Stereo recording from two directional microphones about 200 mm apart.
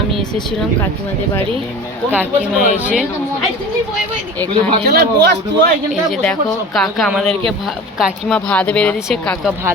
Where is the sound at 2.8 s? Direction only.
5° right (ahead or behind).